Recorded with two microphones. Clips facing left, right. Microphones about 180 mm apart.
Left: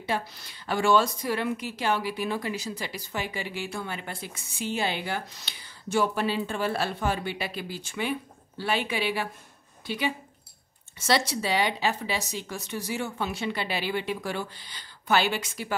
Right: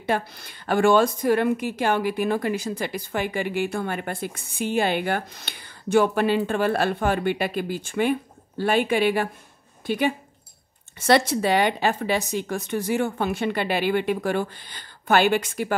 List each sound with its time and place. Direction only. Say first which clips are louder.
0.0 s a woman's voice: right 5 dB; 55° right (ahead or behind)